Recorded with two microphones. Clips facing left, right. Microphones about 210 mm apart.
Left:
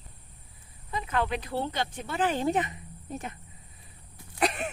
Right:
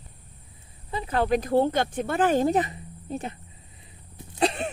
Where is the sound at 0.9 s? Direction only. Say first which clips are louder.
Right 6 dB; 35° right (ahead or behind).